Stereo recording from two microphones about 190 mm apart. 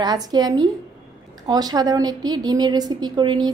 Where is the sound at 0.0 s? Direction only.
20° right (ahead or behind).